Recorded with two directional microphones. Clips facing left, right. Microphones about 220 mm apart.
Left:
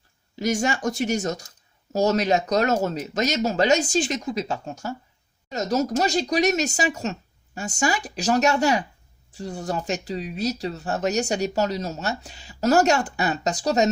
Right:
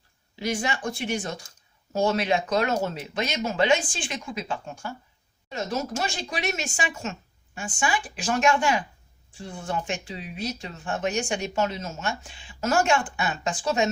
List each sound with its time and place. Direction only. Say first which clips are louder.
0.3 s speech: left 5 dB; 45° left (ahead or behind)